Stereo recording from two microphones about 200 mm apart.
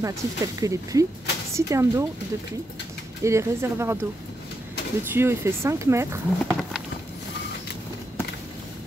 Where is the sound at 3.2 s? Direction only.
15° right (ahead or behind).